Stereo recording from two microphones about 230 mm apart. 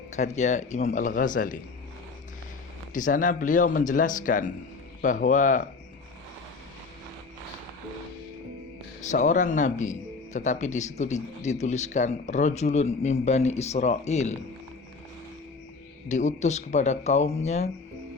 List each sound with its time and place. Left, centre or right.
0.1 s speech: left
2.9 s speech: left
9.0 s speech: left
16.0 s speech: left